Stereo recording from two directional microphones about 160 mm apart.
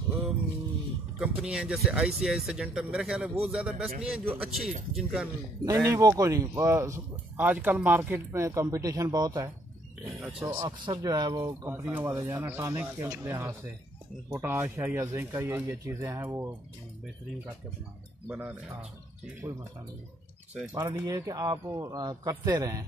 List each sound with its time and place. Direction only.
1.2 s speech: 5° right (ahead or behind)
5.7 s speech: 20° right (ahead or behind)
10.4 s speech: 20° right (ahead or behind)
18.3 s speech: 10° right (ahead or behind)
20.7 s speech: 20° right (ahead or behind)